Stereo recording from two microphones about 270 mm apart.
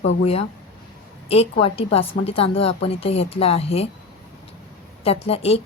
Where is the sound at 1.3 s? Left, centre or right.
Left.